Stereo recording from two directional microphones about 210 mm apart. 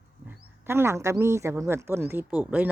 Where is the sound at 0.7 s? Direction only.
10° right (ahead or behind).